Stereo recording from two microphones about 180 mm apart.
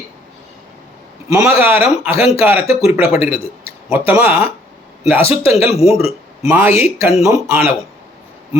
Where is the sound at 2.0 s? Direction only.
35° left (ahead or behind).